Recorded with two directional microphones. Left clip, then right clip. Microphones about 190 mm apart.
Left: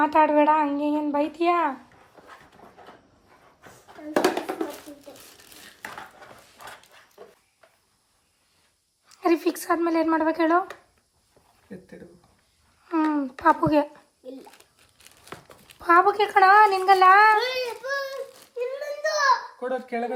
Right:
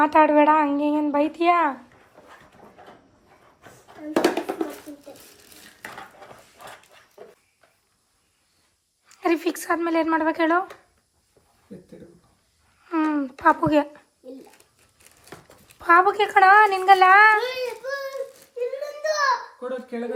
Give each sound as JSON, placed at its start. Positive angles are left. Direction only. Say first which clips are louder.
{"t": 0.0, "sound": "speech", "louder": "right 3 dB", "side_deg": 5}
{"t": 3.6, "sound": "a sound", "louder": "right 2 dB", "side_deg": 0}
{"t": 5.0, "sound": "dishes", "louder": "right 1 dB", "side_deg": 0}
{"t": 9.0, "sound": "speech", "louder": "even", "side_deg": 10}
{"t": 12.8, "sound": "speech", "louder": "right 1 dB", "side_deg": 10}
{"t": 15.3, "sound": "a sound", "louder": "left 2 dB", "side_deg": 0}
{"t": 15.8, "sound": "speech", "louder": "right 1 dB", "side_deg": 10}
{"t": 17.3, "sound": "a sound", "louder": "right 1 dB", "side_deg": 0}
{"t": 19.9, "sound": "speech", "louder": "left 2 dB", "side_deg": 25}